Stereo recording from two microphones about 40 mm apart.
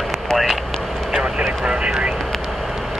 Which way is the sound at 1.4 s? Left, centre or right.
Right.